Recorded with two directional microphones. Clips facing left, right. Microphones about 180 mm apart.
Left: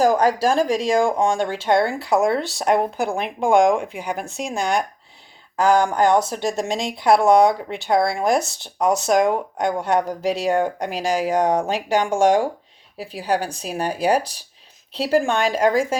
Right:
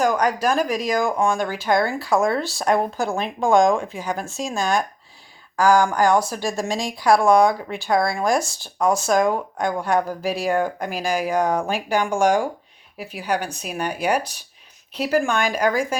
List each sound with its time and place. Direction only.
0.0 s speech: 30° left (ahead or behind)